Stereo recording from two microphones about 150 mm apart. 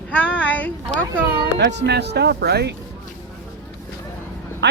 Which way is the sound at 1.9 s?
90° right.